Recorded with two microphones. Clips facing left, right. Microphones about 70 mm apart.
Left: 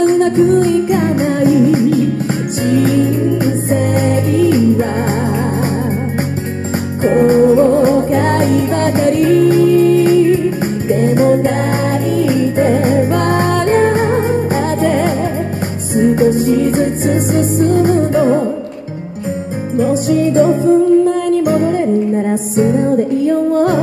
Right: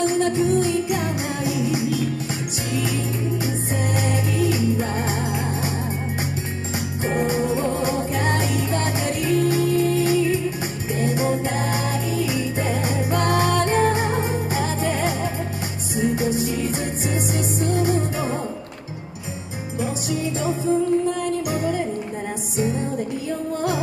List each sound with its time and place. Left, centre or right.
0.0 s music: left
7.0 s music: left
19.8 s music: left